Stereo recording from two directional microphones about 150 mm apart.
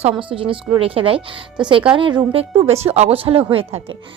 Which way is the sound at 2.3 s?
40° right (ahead or behind).